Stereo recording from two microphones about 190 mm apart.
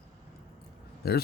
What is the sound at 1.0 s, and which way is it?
Speech, 55° left (ahead or behind).